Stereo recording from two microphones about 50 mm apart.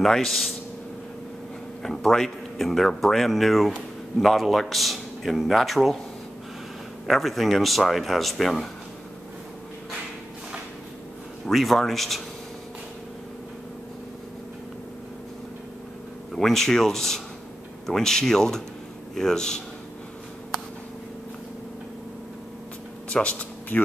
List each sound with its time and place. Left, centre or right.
0.0 s speech: centre
1.8 s speech: centre
7.1 s speech: centre
11.5 s speech: centre
16.3 s speech: centre
23.0 s speech: left